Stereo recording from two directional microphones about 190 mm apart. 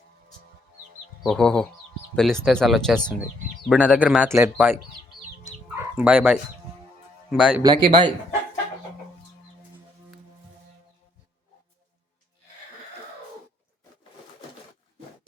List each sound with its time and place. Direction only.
1.2 s speech: 5° left (ahead or behind)
5.6 s bow-wow: 5° right (ahead or behind)
7.3 s a man's voice: 5° right (ahead or behind)
7.6 s speech: 25° right (ahead or behind)